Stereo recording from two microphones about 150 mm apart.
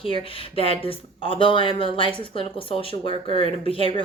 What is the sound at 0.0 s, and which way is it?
Speech, 35° left (ahead or behind).